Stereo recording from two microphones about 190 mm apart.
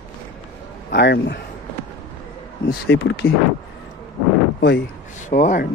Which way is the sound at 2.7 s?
60° left (ahead or behind).